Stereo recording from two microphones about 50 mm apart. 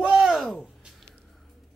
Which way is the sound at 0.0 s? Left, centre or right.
Centre.